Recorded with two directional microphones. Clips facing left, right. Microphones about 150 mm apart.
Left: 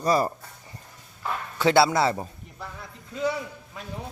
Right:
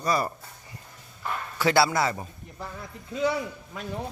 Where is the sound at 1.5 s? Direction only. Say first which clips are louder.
Left 3 dB; 20° left (ahead or behind).